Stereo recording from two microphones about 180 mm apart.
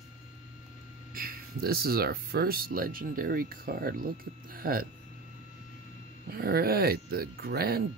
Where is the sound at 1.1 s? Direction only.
55° right (ahead or behind).